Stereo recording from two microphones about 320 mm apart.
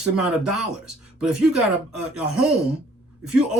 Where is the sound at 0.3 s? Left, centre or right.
Centre.